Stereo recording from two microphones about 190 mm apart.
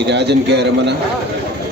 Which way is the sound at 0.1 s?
60° right (ahead or behind).